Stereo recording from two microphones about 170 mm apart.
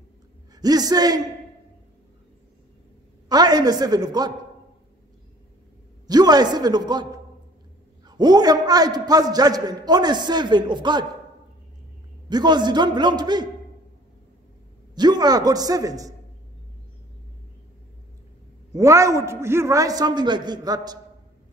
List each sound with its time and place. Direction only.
0.6 s a man's voice: 20° right (ahead or behind)
3.3 s a man's voice: 25° right (ahead or behind)
6.0 s a man's voice: 25° right (ahead or behind)
8.1 s a man's voice: 25° right (ahead or behind)
12.3 s a man's voice: 25° right (ahead or behind)
15.0 s a man's voice: 25° right (ahead or behind)
18.7 s a man's voice: 20° right (ahead or behind)